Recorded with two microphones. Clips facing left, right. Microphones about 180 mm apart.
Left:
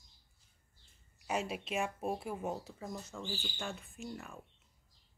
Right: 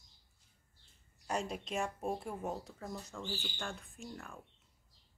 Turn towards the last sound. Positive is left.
turn(degrees=0)  # may be behind; listen again after turning